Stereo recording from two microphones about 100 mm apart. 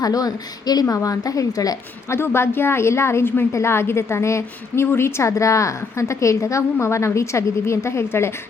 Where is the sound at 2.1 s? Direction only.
25° left (ahead or behind).